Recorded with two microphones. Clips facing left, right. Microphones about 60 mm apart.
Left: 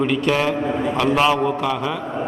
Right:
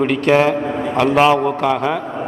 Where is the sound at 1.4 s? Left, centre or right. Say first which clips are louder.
Right 4 dB; right.